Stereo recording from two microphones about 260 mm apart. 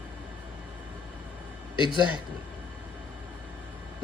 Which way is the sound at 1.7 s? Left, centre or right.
Centre.